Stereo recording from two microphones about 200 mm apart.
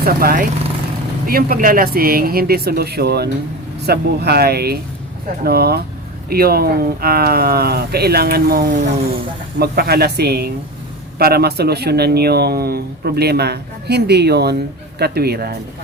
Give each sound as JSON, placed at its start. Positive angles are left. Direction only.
{"t": 0.0, "sound": "speech", "side_deg": -45}
{"t": 9.6, "sound": "speech", "side_deg": -50}